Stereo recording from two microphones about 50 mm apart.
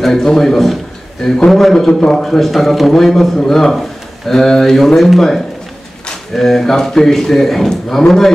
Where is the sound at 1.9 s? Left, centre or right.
Centre.